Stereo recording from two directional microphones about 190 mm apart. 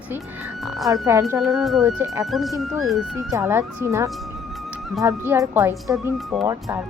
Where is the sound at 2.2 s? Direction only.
Centre (ahead or behind).